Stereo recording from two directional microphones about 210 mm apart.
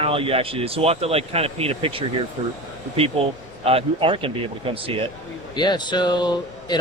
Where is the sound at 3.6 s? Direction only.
25° right (ahead or behind).